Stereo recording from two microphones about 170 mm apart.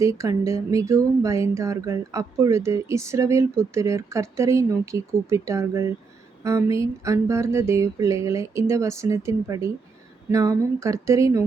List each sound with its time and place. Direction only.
0.0 s speech: 20° right (ahead or behind)